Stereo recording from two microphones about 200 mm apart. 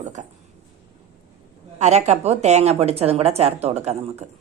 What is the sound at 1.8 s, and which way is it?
Speech, 35° right (ahead or behind).